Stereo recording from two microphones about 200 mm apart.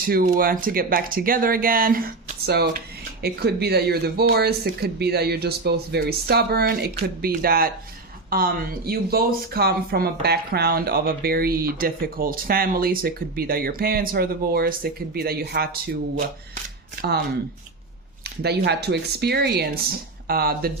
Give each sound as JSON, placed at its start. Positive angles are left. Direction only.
{"t": 0.0, "sound": "speech", "side_deg": -45}
{"t": 3.2, "sound": "speech", "side_deg": -55}
{"t": 17.0, "sound": "speech", "side_deg": -50}
{"t": 18.4, "sound": "speech", "side_deg": -55}